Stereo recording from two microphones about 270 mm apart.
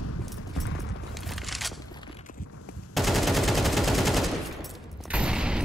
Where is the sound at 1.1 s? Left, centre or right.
Centre.